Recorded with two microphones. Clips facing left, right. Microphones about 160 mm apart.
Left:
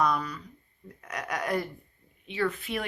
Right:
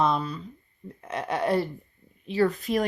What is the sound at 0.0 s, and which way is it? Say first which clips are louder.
Speech: right 3 dB; 25° right (ahead or behind).